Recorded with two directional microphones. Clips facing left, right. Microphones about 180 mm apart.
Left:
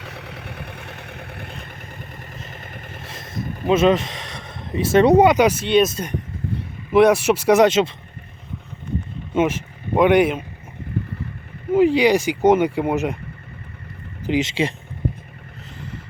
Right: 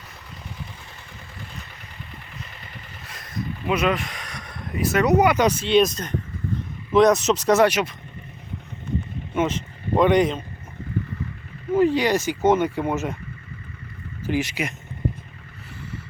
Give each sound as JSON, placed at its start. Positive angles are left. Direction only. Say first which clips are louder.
{"t": 0.0, "sound": "vehicle", "louder": "left 7 dB", "side_deg": 75}
{"t": 3.1, "sound": "vehicle", "louder": "left 1 dB", "side_deg": 25}
{"t": 3.7, "sound": "speech", "louder": "left 7 dB", "side_deg": 25}
{"t": 5.4, "sound": "speech", "louder": "left 2 dB", "side_deg": 5}
{"t": 9.5, "sound": "speech", "louder": "even", "side_deg": 5}
{"t": 11.7, "sound": "speech", "louder": "left 4 dB", "side_deg": 15}
{"t": 14.3, "sound": "speech", "louder": "left 4 dB", "side_deg": 20}